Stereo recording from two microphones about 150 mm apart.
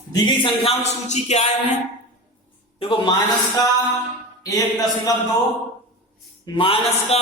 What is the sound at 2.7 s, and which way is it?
Speech, 40° left (ahead or behind).